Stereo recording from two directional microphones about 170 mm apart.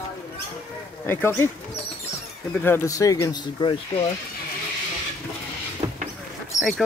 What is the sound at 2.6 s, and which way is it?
Speech, 15° left (ahead or behind).